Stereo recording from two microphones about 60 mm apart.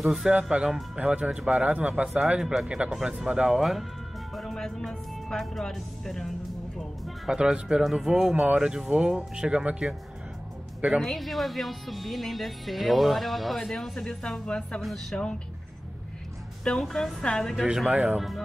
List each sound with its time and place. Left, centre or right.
0.0 s speech: centre
1.7 s speech: right
4.4 s speech: centre
7.2 s speech: centre
11.0 s speech: centre
14.8 s speech: centre
16.6 s a woman's voice: centre
17.9 s speech: right